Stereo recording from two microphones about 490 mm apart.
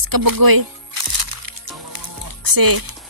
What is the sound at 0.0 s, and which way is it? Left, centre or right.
Music, right.